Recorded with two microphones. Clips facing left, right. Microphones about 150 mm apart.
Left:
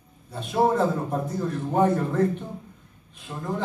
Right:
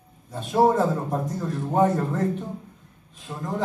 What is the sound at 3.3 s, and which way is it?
Speech, 25° right (ahead or behind).